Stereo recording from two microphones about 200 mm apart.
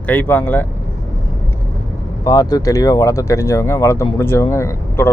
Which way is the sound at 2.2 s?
20° left (ahead or behind).